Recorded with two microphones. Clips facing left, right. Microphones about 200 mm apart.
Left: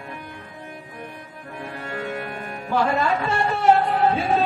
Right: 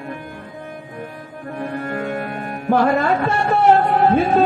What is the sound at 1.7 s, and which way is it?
Music, 50° right (ahead or behind).